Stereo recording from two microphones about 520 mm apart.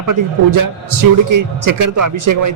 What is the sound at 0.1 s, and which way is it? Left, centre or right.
A man's voice, right.